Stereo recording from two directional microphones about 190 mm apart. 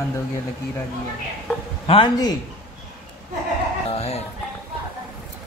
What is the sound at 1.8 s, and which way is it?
Speech, 30° left (ahead or behind).